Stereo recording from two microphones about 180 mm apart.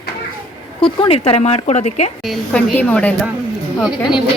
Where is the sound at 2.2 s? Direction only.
5° left (ahead or behind).